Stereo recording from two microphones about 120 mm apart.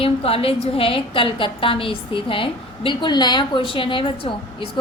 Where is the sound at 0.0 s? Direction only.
50° left (ahead or behind).